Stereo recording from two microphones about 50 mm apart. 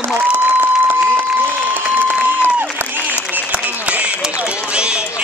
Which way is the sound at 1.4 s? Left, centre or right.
Right.